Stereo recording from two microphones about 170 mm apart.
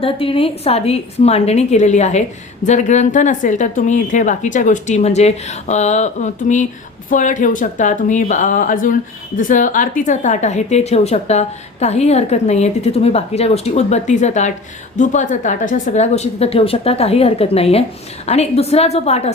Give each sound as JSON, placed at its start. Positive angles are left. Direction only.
{"t": 0.0, "sound": "a woman's voice", "side_deg": 35}